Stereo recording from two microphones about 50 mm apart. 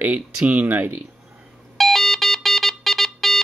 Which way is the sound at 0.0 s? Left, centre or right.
Right.